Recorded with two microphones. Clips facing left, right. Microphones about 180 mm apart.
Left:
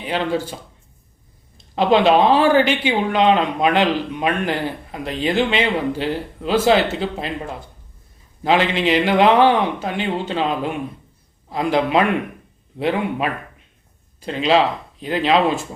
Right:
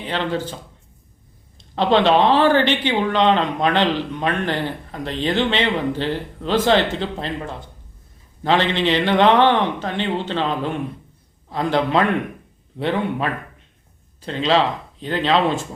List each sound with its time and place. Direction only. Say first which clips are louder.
0.0 s speech: left 2 dB; 10° left (ahead or behind)
1.5 s speech: left 1 dB; 10° left (ahead or behind)